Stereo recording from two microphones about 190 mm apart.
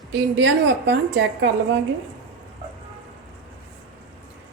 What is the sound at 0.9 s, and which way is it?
Speech, 65° right (ahead or behind).